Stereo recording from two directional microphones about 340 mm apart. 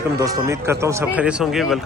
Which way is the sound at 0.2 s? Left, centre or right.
Centre.